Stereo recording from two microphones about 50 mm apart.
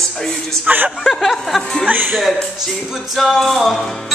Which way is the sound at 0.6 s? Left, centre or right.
Right.